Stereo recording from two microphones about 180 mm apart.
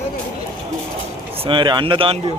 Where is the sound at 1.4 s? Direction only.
25° right (ahead or behind).